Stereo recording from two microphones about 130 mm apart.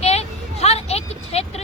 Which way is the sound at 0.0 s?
55° left (ahead or behind).